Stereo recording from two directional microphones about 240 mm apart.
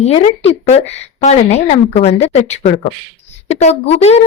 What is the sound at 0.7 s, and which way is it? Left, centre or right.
A woman's voice, left.